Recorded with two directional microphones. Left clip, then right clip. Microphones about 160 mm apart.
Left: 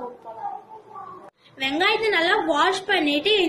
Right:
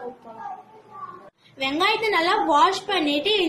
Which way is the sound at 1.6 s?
20° right (ahead or behind).